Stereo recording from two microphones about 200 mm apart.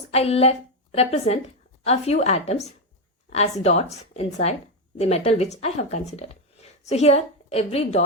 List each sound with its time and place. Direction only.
0.1 s a woman's voice: 30° left (ahead or behind)